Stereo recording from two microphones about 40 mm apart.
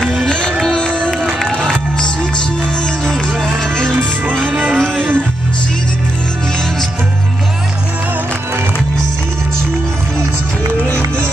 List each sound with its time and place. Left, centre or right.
0.5 s music: centre
0.7 s music: centre
1.4 s music: centre
4.3 s music: centre